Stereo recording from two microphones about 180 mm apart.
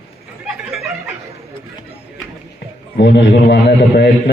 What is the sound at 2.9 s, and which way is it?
A man's voice, 75° left (ahead or behind).